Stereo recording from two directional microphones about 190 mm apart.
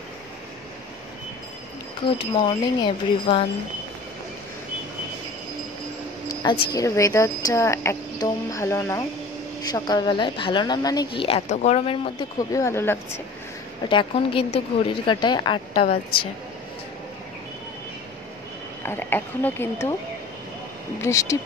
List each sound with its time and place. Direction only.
2.0 s speech: 25° left (ahead or behind)
6.2 s speech: 25° left (ahead or behind)
12.4 s speech: 15° left (ahead or behind)
13.8 s speech: 25° left (ahead or behind)
18.8 s speech: 10° left (ahead or behind)
21.0 s speech: 15° left (ahead or behind)